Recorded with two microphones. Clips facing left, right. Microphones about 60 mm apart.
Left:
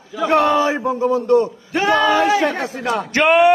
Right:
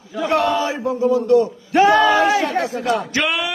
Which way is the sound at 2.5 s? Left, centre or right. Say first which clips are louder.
Right 2 dB; left.